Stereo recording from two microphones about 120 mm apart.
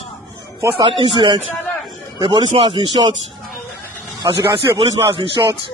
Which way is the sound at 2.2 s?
40° right (ahead or behind).